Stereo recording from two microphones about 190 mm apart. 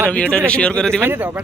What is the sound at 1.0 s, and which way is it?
Speech, 10° right (ahead or behind).